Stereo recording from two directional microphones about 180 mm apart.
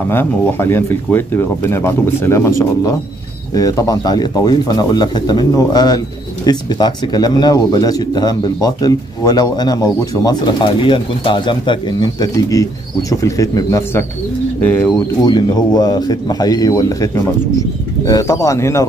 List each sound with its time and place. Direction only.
0.1 s speech: 15° left (ahead or behind)
15.2 s speech: 20° left (ahead or behind)